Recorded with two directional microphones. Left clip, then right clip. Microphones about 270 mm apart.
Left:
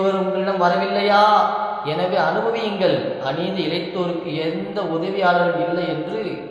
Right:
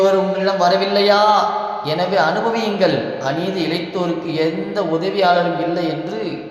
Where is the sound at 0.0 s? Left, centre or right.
Right.